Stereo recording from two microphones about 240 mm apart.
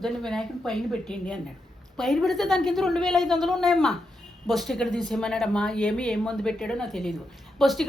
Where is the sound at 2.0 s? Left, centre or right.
Centre.